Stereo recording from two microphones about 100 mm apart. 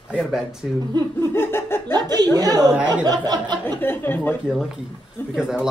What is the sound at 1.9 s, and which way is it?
A woman's voice, 45° right (ahead or behind).